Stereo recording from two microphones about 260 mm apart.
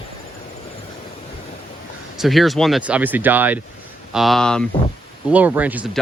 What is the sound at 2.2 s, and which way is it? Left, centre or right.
Speech, centre.